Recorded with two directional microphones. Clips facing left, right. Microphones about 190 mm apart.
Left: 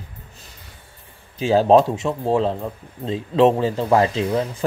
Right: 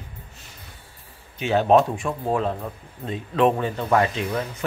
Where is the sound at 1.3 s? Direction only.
30° left (ahead or behind).